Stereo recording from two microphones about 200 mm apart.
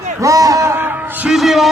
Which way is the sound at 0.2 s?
15° right (ahead or behind).